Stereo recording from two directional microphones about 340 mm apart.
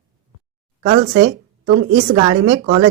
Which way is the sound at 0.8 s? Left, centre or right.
Right.